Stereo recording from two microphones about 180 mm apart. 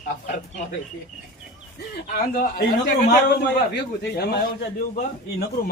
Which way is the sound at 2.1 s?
60° left (ahead or behind).